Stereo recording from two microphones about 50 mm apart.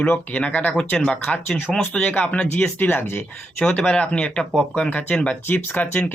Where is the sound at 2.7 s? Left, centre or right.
Left.